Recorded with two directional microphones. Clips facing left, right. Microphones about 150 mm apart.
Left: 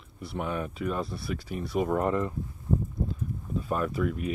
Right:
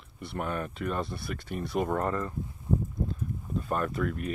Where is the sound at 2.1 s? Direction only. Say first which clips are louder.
Left 4 dB; 15° left (ahead or behind).